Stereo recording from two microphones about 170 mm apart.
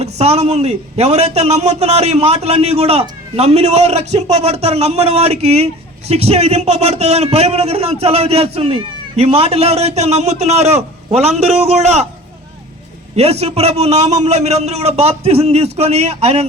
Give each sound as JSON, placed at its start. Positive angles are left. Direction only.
{"t": 0.0, "sound": "a man's voice", "side_deg": -40}
{"t": 13.1, "sound": "a man's voice", "side_deg": -40}